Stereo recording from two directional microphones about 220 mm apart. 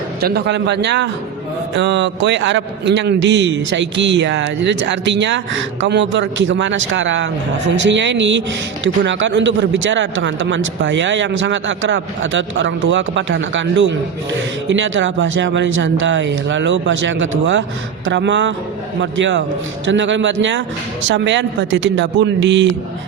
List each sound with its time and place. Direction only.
0.2 s a man's voice: 45° right (ahead or behind)